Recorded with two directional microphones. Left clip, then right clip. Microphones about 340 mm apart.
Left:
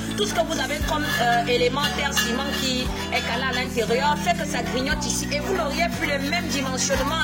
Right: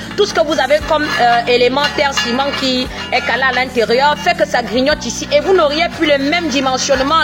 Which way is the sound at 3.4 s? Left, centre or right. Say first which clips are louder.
Right 11 dB; left.